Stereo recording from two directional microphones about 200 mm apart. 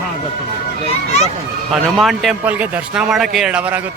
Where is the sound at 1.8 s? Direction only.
Centre (ahead or behind).